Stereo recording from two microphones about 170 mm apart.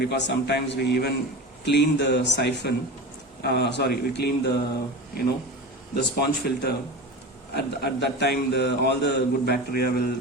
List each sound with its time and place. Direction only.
0.0 s a man's voice: 80° left
1.6 s a man's voice: 90° left
5.9 s a man's voice: 70° left (ahead or behind)